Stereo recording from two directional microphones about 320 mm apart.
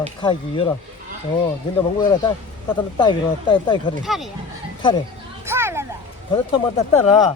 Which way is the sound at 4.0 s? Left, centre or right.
Centre.